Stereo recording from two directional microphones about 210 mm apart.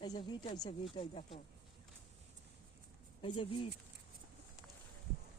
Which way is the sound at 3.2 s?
25° left (ahead or behind).